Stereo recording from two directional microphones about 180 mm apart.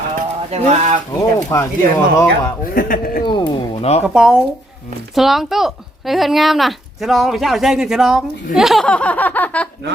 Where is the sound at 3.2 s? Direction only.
25° left (ahead or behind).